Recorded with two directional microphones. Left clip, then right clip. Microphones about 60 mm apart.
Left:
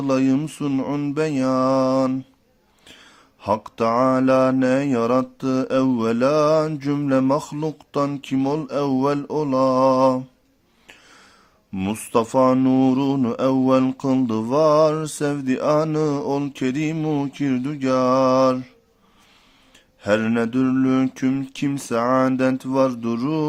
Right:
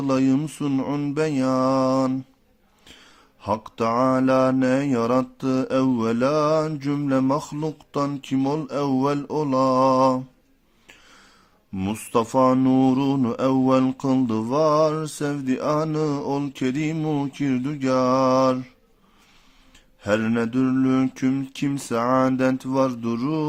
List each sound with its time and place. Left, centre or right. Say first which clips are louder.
0.0 s speech: left 1 dB; centre
0.6 s speech: left 1 dB; centre; by 2.1 s left
2.8 s mantra: left 2 dB; left
5.4 s speech: left 2 dB; centre
6.0 s mantra: left 3 dB; left
10.8 s a sound: left 2 dB; left
11.7 s speech: left 2 dB; left; by 14.0 s centre
14.0 s mantra: left 1 dB; left
20.0 s speech: left 2 dB; left
21.7 s mantra: left 2 dB; left